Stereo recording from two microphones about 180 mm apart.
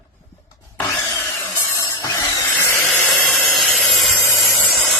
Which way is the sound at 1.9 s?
15° left (ahead or behind).